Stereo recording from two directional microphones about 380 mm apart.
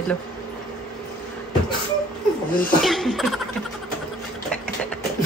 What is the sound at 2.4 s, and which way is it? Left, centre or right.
Speech, left.